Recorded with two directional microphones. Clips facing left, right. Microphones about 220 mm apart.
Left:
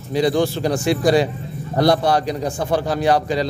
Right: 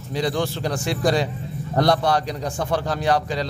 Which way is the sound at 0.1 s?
10° left (ahead or behind).